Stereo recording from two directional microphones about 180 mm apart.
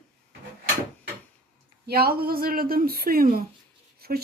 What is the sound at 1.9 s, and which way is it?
Speech, 60° right (ahead or behind).